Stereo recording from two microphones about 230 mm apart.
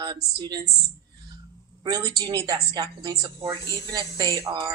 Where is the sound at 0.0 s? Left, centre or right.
Centre.